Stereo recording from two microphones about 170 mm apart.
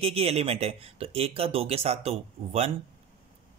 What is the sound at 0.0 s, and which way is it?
Speech, 35° right (ahead or behind).